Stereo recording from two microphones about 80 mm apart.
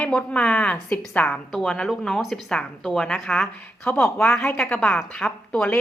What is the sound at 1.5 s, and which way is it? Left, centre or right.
A woman's voice, centre.